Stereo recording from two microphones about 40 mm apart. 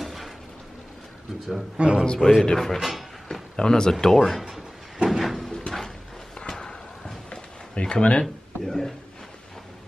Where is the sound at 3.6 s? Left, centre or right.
Centre.